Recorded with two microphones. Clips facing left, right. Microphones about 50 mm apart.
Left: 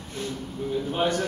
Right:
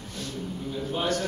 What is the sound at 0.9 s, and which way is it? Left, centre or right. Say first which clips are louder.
Speech: left 2 dB; left.